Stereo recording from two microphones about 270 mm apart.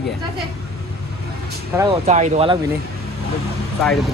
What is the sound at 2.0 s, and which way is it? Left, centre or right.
Speech, right.